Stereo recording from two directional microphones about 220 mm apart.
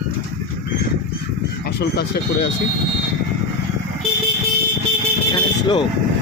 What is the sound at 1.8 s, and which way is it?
Speech, 50° left (ahead or behind).